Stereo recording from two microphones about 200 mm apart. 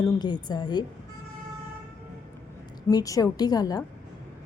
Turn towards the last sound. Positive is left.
turn(degrees=20)  # may be behind; listen again after turning